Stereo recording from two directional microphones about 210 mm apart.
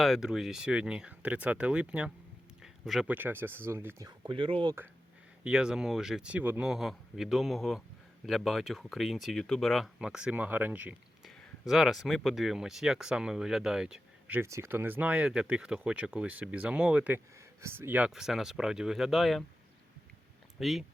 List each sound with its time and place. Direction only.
0.0 s speech: centre (ahead or behind)
4.3 s speech: 25° right (ahead or behind)
5.4 s speech: 5° right (ahead or behind)
20.6 s speech: centre (ahead or behind)